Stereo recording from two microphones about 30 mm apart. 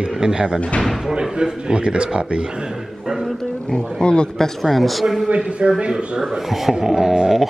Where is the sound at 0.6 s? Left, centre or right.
Left.